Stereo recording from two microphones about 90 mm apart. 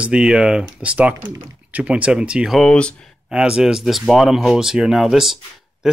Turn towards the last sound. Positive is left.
turn(degrees=-5)  # may be behind; listen again after turning